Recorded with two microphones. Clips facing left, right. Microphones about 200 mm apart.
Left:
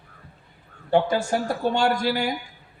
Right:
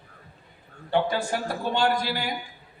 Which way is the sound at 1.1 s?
45° left (ahead or behind).